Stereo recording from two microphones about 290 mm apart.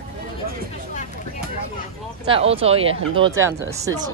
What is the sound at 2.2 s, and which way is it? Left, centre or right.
A woman's voice, centre.